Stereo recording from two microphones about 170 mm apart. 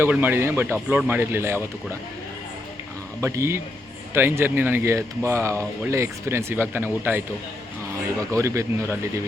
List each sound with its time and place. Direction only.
0.0 s speech: 10° right (ahead or behind)
3.2 s speech: 15° right (ahead or behind)